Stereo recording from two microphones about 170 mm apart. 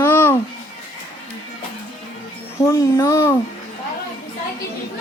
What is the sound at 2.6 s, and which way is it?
Speech, 20° left (ahead or behind).